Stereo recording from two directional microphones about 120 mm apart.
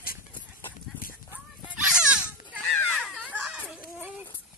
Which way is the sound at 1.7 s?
10° right (ahead or behind).